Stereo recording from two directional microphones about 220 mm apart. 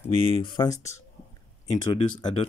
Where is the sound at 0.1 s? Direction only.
25° left (ahead or behind).